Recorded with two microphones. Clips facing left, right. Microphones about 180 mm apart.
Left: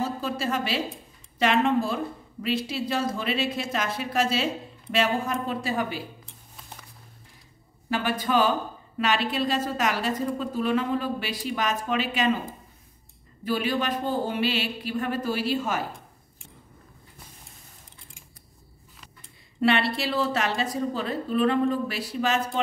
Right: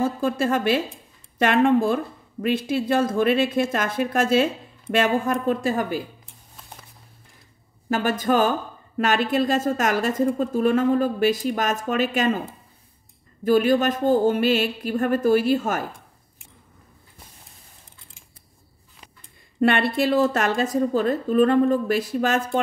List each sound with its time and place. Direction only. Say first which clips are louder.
0.0 s a woman's voice: right 6 dB; 50° right (ahead or behind)
7.9 s a woman's voice: right 4 dB; 45° right (ahead or behind)
13.4 s a woman's voice: right 8 dB; 45° right (ahead or behind)
19.6 s a woman's voice: right 4 dB; 50° right (ahead or behind)